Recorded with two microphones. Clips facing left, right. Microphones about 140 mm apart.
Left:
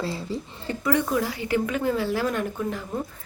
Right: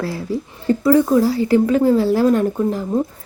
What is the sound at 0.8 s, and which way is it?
Speech, 30° right (ahead or behind).